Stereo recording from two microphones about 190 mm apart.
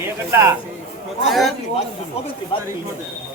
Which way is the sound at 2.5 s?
25° left (ahead or behind).